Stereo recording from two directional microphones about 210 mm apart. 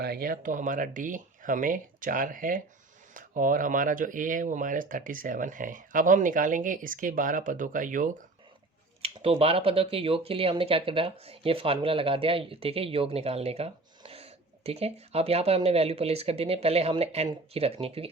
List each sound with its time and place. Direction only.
0.0 s speech: 45° right (ahead or behind)
9.0 s speech: 25° right (ahead or behind)